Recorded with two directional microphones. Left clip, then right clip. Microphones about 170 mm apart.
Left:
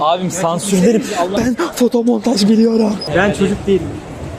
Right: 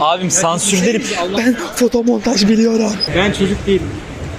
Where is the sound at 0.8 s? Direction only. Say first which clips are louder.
Left 2 dB; 45° left (ahead or behind).